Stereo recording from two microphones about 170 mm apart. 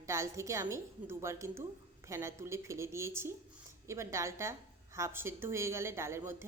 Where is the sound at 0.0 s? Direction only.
15° right (ahead or behind).